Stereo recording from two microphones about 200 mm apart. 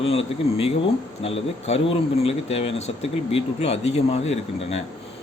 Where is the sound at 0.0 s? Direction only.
30° left (ahead or behind).